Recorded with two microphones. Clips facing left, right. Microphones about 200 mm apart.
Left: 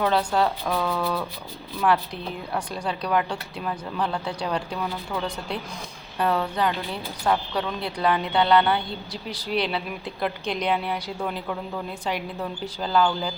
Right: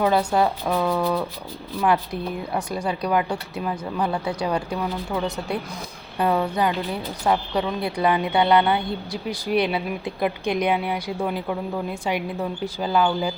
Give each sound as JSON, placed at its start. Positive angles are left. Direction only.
{"t": 0.0, "sound": "speech", "side_deg": -10}
{"t": 2.5, "sound": "speech", "side_deg": -10}
{"t": 6.1, "sound": "speech", "side_deg": -15}